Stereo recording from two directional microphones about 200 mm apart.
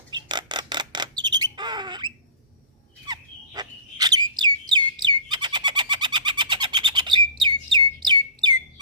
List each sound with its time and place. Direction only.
0.1 s a sound: 20° right (ahead or behind)
1.5 s bird: 20° right (ahead or behind)
7.4 s chirp: 20° right (ahead or behind)